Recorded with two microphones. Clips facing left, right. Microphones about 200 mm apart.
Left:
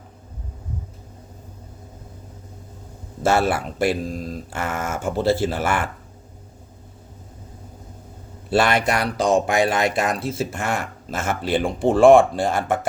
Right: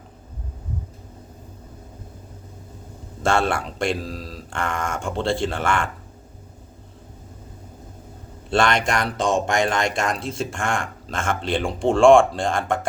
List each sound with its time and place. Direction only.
3.2 s speech: 5° left (ahead or behind)
4.0 s speech: 50° left (ahead or behind)
4.5 s speech: 5° left (ahead or behind)
8.4 s speech: 5° left (ahead or behind)